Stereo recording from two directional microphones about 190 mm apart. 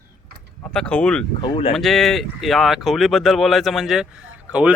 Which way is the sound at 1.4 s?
30° left (ahead or behind).